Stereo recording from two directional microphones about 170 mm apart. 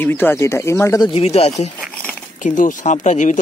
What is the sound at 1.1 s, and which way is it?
Speech, 35° left (ahead or behind).